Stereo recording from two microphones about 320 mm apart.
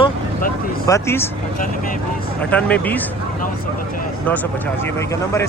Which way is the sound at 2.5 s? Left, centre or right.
Centre.